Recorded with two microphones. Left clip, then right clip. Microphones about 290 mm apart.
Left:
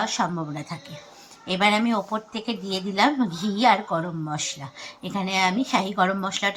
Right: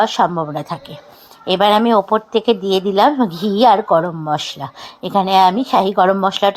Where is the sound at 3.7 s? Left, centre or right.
Right.